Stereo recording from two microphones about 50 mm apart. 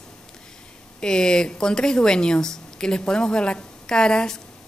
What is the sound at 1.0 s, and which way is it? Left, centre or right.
A woman's voice, centre.